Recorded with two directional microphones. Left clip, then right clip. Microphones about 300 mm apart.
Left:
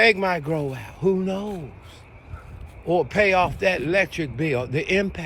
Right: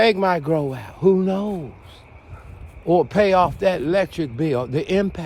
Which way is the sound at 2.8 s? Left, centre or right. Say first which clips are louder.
Right 3 dB; centre.